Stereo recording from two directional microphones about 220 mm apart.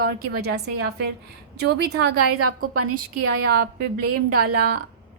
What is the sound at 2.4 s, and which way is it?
Speech, 90° right.